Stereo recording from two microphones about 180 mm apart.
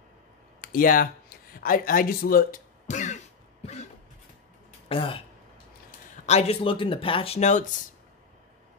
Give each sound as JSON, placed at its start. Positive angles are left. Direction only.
{"t": 0.6, "sound": "speech", "side_deg": 50}
{"t": 4.8, "sound": "speech", "side_deg": 30}
{"t": 6.2, "sound": "speech", "side_deg": 35}